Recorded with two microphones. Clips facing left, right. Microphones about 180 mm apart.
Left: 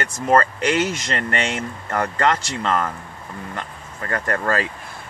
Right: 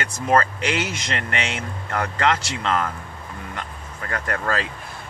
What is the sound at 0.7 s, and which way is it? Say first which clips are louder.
Speech: left 4 dB; 45° left (ahead or behind).